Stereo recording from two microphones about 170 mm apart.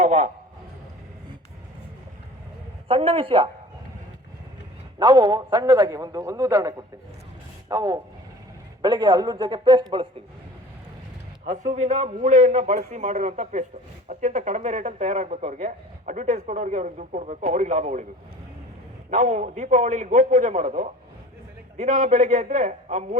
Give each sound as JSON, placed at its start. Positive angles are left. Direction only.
{"t": 0.0, "sound": "a sound", "side_deg": -40}
{"t": 2.8, "sound": "a woman's voice", "side_deg": -35}
{"t": 4.9, "sound": "a man's voice", "side_deg": -25}
{"t": 11.4, "sound": "speech", "side_deg": -45}
{"t": 19.1, "sound": "speech", "side_deg": -45}